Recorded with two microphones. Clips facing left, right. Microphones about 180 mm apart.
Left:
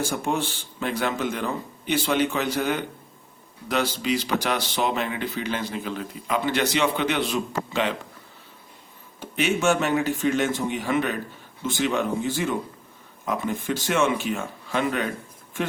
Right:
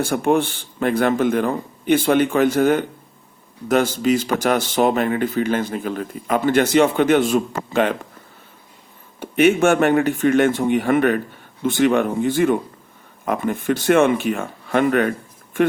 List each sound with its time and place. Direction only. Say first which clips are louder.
0.0 s speech: right 8 dB; 60° right (ahead or behind)
9.2 s speech: right 7 dB; 55° right (ahead or behind)